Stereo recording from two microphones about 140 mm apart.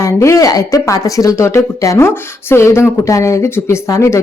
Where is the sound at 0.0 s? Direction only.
20° left (ahead or behind).